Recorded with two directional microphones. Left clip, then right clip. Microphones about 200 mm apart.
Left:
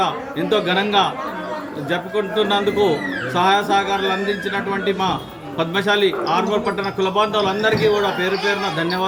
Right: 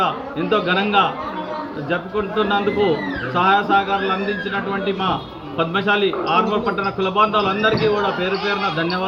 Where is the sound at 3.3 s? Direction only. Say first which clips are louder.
Right 1 dB; 20° left (ahead or behind).